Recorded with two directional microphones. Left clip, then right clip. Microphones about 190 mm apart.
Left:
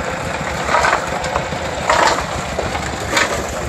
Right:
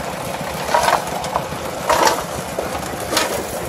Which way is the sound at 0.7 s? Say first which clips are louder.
Left 1 dB; 60° right (ahead or behind).